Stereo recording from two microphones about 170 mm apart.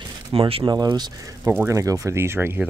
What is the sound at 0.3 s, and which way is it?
Speech, 35° right (ahead or behind).